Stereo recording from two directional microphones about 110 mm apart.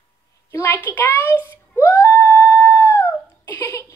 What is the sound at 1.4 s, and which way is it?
Whimper, 20° left (ahead or behind).